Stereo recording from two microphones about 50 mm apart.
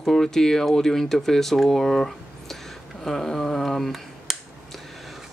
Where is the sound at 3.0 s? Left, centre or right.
Centre.